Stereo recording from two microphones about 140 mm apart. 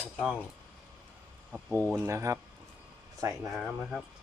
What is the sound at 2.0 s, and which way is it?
Speech, 20° right (ahead or behind).